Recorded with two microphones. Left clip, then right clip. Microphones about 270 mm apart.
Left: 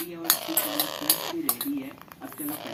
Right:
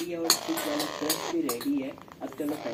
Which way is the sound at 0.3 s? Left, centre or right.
Left.